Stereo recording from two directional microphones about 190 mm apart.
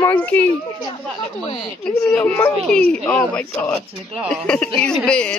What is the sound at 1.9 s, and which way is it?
Speech, 5° left (ahead or behind).